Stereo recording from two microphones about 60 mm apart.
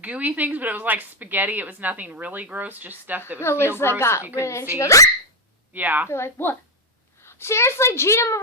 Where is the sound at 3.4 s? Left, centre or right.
Left.